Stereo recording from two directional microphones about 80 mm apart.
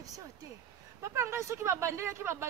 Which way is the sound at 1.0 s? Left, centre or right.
Right.